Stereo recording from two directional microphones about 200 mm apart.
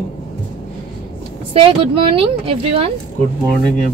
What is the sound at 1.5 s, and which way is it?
Speech, 30° right (ahead or behind).